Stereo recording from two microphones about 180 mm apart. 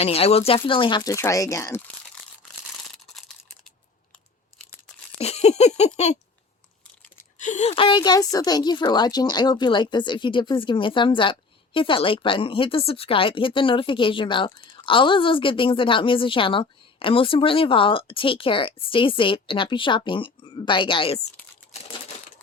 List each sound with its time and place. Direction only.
0.0 s a woman's voice: 35° left (ahead or behind); by 1.8 s 15° left (ahead or behind)
5.1 s a sound: 35° left (ahead or behind)
7.3 s a woman's voice: 40° left (ahead or behind)